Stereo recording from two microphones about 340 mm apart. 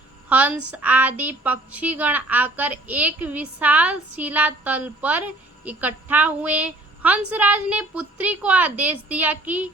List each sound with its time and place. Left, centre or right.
0.3 s a woman's voice: centre